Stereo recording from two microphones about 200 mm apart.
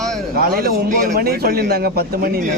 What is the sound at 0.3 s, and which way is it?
A man's voice, 50° right (ahead or behind).